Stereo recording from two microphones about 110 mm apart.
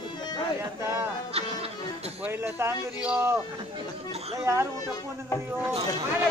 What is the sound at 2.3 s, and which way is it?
Speech, 20° right (ahead or behind).